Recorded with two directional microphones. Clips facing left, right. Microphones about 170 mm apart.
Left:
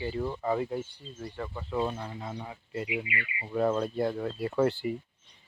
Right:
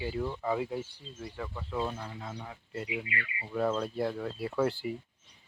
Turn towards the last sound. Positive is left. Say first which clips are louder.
# left 3 dB
turn(degrees=0)  # may be behind; listen again after turning